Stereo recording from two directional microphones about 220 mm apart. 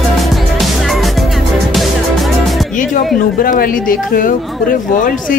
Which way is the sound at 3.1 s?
40° left (ahead or behind).